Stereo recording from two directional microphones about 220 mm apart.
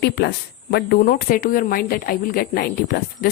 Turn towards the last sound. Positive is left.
turn(degrees=40)  # may be behind; listen again after turning